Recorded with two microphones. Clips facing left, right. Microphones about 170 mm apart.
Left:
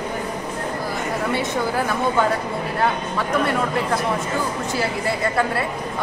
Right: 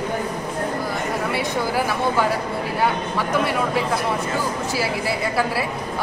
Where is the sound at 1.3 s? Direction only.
5° right (ahead or behind).